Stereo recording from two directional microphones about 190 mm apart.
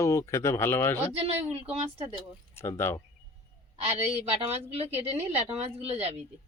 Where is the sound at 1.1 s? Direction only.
30° right (ahead or behind).